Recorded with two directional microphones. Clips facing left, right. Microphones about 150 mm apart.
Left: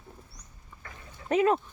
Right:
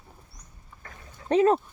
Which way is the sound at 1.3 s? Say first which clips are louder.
Right 3 dB; 35° right (ahead or behind).